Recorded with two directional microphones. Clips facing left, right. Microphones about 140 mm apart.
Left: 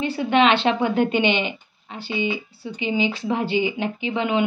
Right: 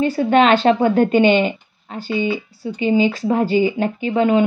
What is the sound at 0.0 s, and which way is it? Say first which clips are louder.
Speech: right 4 dB; 45° right (ahead or behind).